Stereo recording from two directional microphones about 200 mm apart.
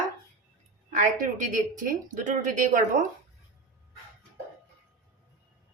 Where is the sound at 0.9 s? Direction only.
40° right (ahead or behind).